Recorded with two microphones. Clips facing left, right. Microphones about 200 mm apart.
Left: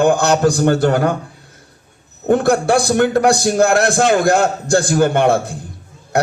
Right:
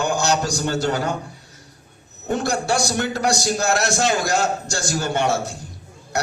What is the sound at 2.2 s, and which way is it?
A man's voice, 55° left (ahead or behind).